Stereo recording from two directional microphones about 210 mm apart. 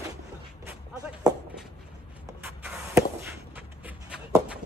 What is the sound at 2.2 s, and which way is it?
Vehicle, 10° right (ahead or behind).